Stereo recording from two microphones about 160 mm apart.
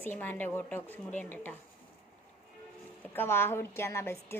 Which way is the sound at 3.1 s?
15° left (ahead or behind).